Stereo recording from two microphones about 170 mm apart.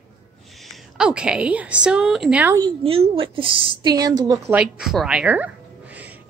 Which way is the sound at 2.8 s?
35° right (ahead or behind).